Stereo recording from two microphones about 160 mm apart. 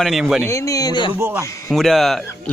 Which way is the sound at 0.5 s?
20° left (ahead or behind).